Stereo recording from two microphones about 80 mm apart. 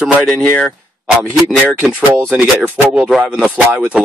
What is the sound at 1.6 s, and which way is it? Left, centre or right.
Speech, right.